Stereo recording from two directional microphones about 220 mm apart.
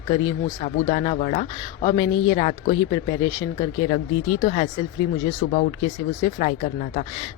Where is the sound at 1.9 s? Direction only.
20° left (ahead or behind).